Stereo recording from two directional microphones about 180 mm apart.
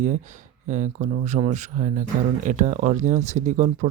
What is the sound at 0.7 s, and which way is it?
Speech, 45° right (ahead or behind).